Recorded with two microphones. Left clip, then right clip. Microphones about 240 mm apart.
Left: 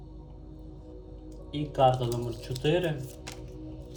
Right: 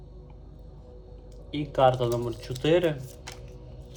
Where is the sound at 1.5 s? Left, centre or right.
Centre.